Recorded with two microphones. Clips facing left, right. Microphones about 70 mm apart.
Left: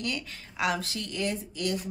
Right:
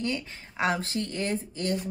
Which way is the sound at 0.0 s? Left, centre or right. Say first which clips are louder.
Right 3 dB; right.